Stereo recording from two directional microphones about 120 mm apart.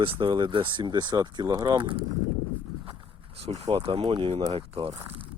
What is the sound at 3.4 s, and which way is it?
Speech, 60° right (ahead or behind).